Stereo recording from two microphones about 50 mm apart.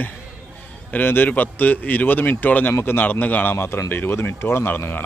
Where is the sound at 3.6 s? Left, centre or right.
Left.